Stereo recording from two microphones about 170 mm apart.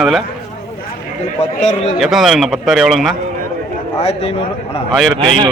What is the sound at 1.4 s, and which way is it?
Speech, 40° left (ahead or behind).